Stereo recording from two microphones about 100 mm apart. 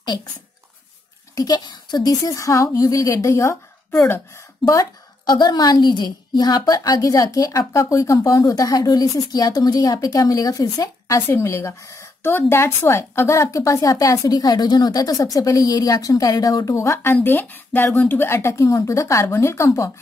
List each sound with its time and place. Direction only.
0.0 s speech: 45° left (ahead or behind)
1.3 s a woman's voice: 40° left (ahead or behind)
4.6 s speech: centre (ahead or behind)
5.2 s a woman's voice: 45° left (ahead or behind)